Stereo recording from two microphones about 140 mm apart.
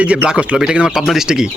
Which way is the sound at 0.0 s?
10° right (ahead or behind).